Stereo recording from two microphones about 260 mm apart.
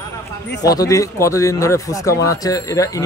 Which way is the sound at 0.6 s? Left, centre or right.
Centre.